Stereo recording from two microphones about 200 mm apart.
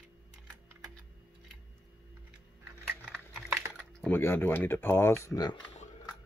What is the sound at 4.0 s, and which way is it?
Speech, 10° left (ahead or behind).